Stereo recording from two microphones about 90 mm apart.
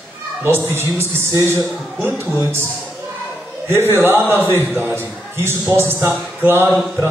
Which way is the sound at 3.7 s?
30° right (ahead or behind).